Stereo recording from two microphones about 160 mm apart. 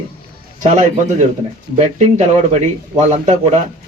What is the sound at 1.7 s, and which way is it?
Speech, 45° right (ahead or behind).